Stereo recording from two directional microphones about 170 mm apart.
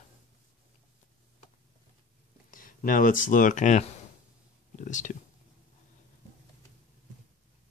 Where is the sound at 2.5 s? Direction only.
55° left (ahead or behind).